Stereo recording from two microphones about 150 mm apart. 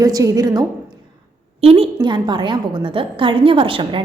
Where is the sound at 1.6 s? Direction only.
40° right (ahead or behind).